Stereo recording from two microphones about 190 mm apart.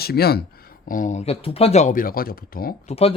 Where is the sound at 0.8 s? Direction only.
45° left (ahead or behind).